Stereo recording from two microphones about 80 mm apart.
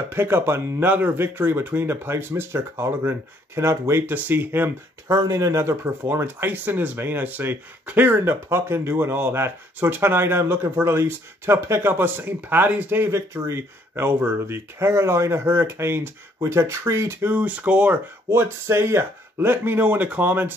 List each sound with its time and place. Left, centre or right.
0.1 s speech: right
5.0 s speech: right
6.1 s speech: right
18.3 s speech: right